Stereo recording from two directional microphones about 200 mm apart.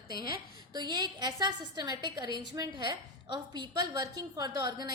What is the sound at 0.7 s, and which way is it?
A woman's voice, 20° right (ahead or behind).